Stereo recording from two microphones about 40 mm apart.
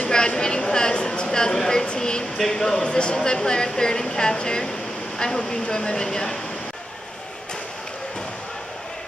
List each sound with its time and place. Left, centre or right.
0.1 s speech: left